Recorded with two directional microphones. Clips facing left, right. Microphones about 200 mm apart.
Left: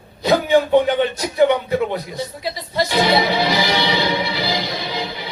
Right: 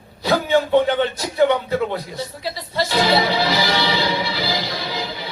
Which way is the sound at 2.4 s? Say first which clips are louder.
Left 2 dB; 15° left (ahead or behind).